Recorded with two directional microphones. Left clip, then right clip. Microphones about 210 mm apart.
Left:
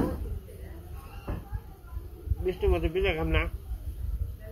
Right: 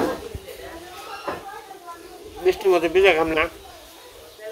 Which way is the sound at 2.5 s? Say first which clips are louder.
Right 10 dB; 5° right (ahead or behind).